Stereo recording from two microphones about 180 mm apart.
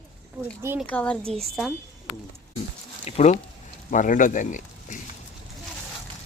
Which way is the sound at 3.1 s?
35° left (ahead or behind).